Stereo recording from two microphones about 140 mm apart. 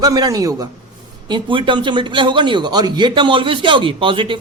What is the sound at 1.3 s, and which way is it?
Speech, 35° right (ahead or behind).